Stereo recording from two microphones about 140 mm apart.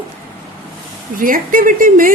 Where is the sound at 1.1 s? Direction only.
75° right (ahead or behind).